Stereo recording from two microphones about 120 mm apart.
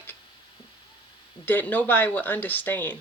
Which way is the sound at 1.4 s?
15° left (ahead or behind).